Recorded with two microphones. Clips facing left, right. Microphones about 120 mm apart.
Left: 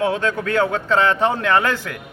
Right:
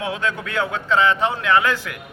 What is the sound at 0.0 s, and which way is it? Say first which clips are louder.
A man's voice: left 5 dB; 40° left (ahead or behind).